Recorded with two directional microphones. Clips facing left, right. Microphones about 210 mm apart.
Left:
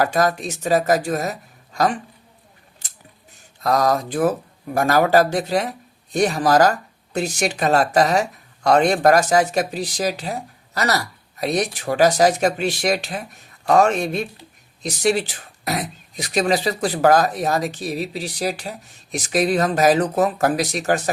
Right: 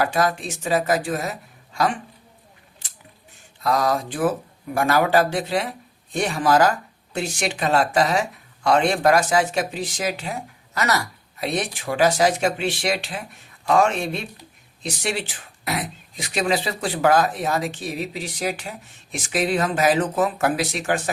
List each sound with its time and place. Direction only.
0.0 s speech: 40° left (ahead or behind)
3.6 s speech: 40° left (ahead or behind)